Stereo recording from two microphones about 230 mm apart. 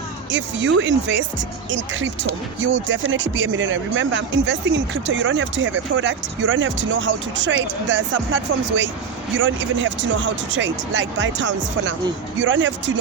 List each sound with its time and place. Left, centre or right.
0.3 s speech: right
2.6 s speech: right